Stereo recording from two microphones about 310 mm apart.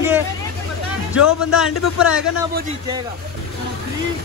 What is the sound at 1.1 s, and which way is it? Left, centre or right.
Speech, left.